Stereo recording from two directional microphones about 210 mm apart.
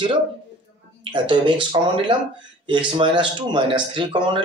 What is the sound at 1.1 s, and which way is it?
Speech, 20° right (ahead or behind).